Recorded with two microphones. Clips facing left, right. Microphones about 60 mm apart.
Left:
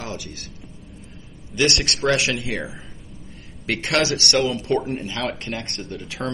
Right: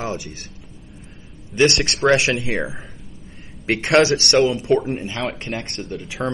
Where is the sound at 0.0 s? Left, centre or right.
Right.